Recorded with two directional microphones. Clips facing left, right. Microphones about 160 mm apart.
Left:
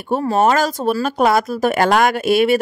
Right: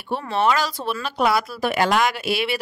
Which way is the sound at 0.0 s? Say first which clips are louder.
Left 6 dB; 40° left (ahead or behind).